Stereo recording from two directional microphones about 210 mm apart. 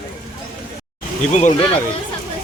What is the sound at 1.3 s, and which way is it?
Speech, 30° left (ahead or behind).